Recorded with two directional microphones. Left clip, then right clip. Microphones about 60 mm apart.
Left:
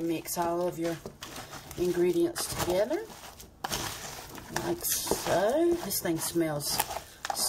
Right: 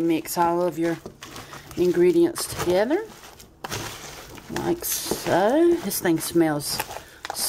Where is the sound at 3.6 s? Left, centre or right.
Centre.